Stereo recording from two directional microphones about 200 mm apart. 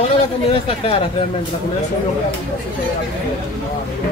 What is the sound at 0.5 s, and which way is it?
Speech, 30° left (ahead or behind).